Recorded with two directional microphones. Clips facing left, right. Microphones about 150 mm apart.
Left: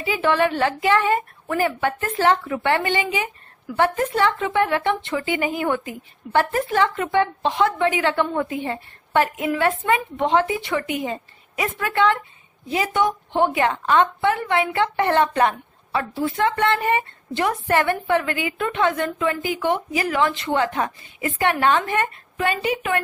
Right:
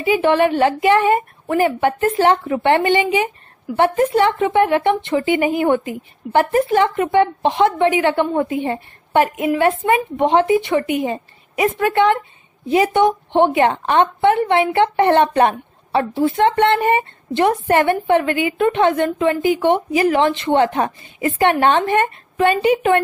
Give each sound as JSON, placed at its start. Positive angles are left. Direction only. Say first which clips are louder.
{"t": 0.0, "sound": "a woman's voice", "louder": "right 5 dB", "side_deg": -20}